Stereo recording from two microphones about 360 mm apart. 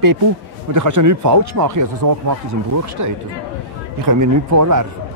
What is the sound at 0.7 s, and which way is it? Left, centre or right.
Speech, right.